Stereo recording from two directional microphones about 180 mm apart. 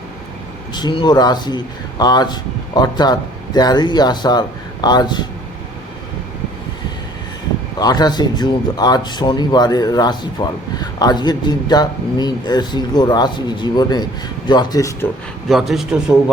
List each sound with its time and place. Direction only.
0.7 s speech: 25° left (ahead or behind)
7.8 s speech: 20° left (ahead or behind)
15.4 s a man's voice: centre (ahead or behind)